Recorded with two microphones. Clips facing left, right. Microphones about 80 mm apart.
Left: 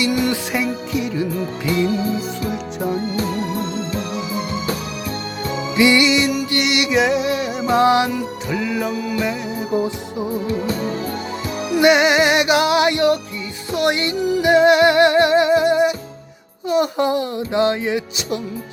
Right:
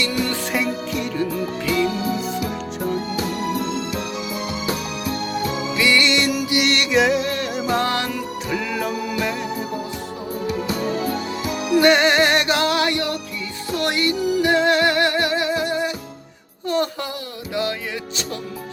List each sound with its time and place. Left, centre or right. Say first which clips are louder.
0.0 s music: left 4 dB; centre
0.5 s music: left 1 dB; centre
1.6 s music: left 1 dB; left
5.7 s music: left 5 dB; left
6.1 s music: left 2 dB; centre
7.7 s music: left 8 dB; centre
8.4 s music: left 2 dB; centre
11.8 s music: left 2 dB; centre
16.6 s a child's voice: left 3 dB; centre
17.0 s music: left 11 dB; left